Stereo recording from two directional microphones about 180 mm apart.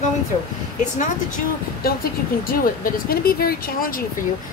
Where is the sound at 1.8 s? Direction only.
55° left (ahead or behind).